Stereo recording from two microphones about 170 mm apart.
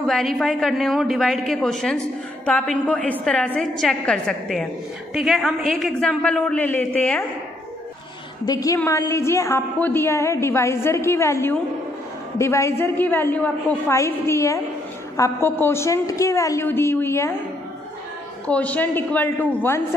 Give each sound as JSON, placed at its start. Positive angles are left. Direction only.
{"t": 0.0, "sound": "a woman's voice", "side_deg": 0}
{"t": 8.5, "sound": "a woman's voice", "side_deg": 20}
{"t": 18.5, "sound": "a woman's voice", "side_deg": 10}